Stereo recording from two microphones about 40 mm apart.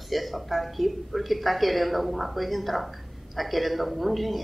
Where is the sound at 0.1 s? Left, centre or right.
Centre.